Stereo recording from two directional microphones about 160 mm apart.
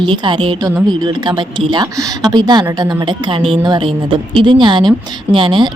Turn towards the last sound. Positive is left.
turn(degrees=-30)  # may be behind; listen again after turning